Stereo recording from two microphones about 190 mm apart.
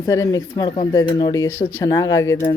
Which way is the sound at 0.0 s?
15° left (ahead or behind).